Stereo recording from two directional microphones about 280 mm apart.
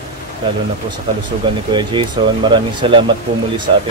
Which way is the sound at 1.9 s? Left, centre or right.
Centre.